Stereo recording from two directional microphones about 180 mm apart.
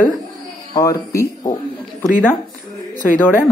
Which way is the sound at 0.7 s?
20° left (ahead or behind).